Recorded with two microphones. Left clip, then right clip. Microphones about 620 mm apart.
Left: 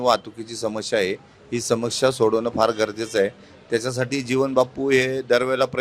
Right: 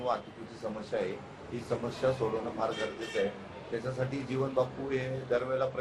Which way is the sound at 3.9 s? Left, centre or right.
Left.